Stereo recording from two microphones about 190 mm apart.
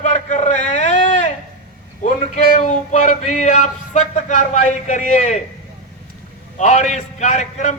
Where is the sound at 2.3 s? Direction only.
40° left (ahead or behind).